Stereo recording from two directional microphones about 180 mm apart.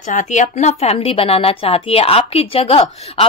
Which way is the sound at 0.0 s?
45° left (ahead or behind).